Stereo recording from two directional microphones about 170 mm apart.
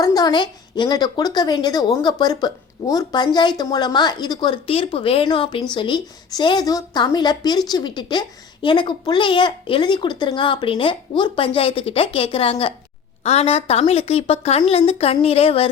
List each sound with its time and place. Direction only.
0.0 s a woman's voice: 20° left (ahead or behind)